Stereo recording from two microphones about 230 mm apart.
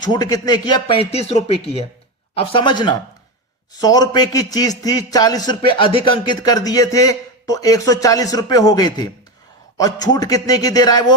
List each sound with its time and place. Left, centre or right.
0.0 s speech: centre